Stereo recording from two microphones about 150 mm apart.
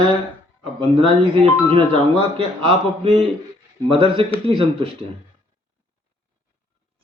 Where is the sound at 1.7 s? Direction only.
40° right (ahead or behind).